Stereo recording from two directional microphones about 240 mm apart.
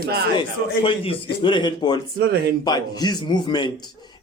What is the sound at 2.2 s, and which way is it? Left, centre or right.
Speech, right.